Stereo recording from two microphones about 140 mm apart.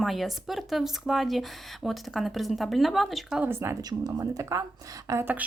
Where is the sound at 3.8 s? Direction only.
30° right (ahead or behind).